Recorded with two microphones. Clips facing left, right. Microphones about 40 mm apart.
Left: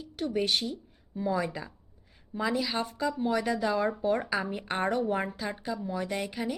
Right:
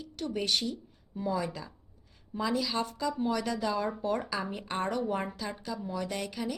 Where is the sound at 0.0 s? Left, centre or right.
Centre.